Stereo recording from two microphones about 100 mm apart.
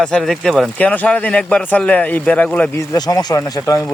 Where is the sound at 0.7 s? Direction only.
15° left (ahead or behind).